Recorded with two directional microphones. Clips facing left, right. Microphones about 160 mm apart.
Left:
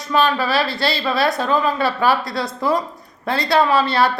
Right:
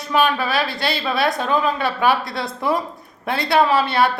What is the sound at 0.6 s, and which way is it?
Speech, 20° right (ahead or behind).